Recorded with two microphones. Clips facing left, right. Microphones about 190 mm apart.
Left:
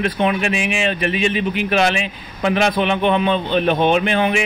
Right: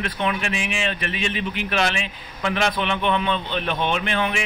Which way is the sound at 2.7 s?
40° left (ahead or behind).